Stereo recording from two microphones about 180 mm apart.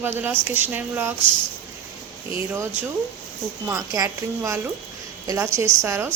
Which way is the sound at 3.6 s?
20° right (ahead or behind).